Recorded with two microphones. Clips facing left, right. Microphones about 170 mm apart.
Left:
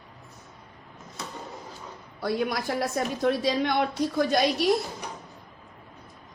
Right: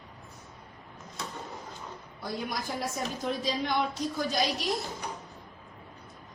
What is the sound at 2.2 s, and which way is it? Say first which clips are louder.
A woman's voice: left 7 dB; 70° left (ahead or behind).